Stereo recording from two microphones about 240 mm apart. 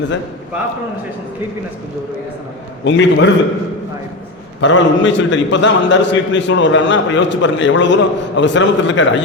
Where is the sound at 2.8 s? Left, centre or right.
Left.